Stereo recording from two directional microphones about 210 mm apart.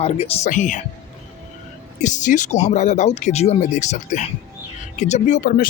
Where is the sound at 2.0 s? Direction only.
35° left (ahead or behind).